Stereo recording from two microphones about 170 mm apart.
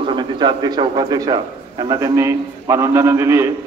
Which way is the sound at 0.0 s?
30° right (ahead or behind).